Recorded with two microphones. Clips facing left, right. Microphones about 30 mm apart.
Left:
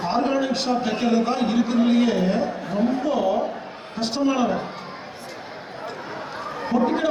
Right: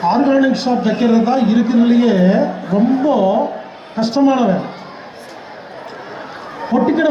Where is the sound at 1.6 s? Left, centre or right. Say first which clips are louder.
Right 4 dB; right.